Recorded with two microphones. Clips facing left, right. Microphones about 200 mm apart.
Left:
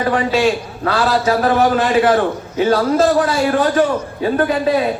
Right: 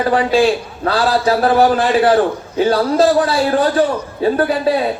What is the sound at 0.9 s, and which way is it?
A man's voice, 35° right (ahead or behind).